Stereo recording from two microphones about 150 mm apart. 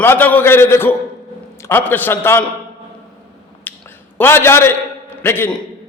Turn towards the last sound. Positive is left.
turn(degrees=15)  # may be behind; listen again after turning